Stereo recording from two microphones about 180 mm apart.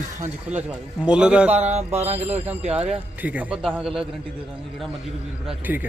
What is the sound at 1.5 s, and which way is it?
Mantra, 40° right (ahead or behind).